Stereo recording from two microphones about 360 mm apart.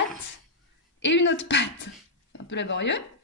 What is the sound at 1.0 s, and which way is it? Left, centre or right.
Speech, left.